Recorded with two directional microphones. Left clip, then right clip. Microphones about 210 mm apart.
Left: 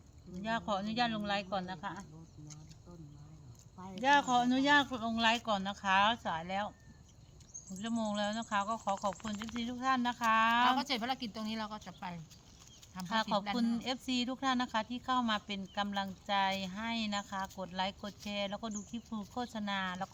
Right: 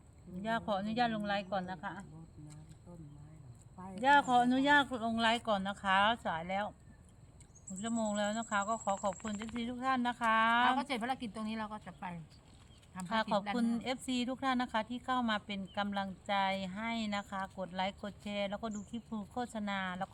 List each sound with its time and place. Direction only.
0.4 s speech: 15° right (ahead or behind)
3.9 s speech: 15° right (ahead or behind)
7.8 s speech: 15° right (ahead or behind)
9.3 s speech: 30° left (ahead or behind)
9.6 s speech: 15° right (ahead or behind)
10.6 s a woman's voice: 10° left (ahead or behind)
13.3 s speech: 15° right (ahead or behind)